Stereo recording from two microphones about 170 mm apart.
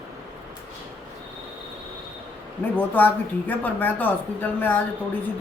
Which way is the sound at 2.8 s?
10° left (ahead or behind).